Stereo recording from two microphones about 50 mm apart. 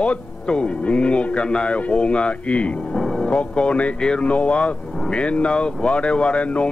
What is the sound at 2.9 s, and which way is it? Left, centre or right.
Vehicle, centre.